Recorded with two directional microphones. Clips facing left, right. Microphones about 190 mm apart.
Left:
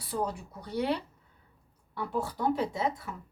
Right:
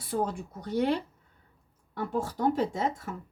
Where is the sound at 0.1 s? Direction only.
50° right (ahead or behind).